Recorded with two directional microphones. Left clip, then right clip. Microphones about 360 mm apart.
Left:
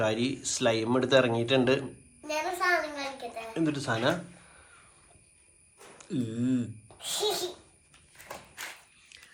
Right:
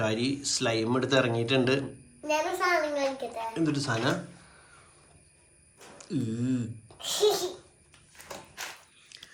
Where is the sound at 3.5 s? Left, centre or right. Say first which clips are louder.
Left 1 dB; centre.